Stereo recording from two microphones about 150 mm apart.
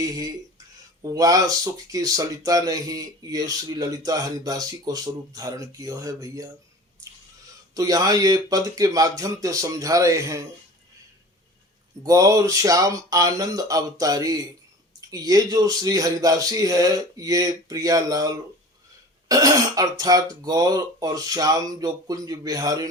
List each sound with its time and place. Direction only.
0.0 s speech: 25° right (ahead or behind)
7.0 s a sound: 20° right (ahead or behind)
7.7 s speech: 25° right (ahead or behind)
12.0 s speech: 20° right (ahead or behind)